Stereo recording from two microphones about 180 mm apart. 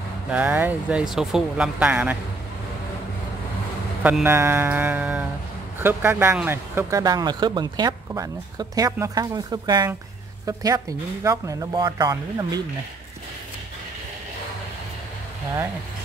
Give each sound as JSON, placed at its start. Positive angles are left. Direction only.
{"t": 0.3, "sound": "speech", "side_deg": -10}
{"t": 4.0, "sound": "speech", "side_deg": -10}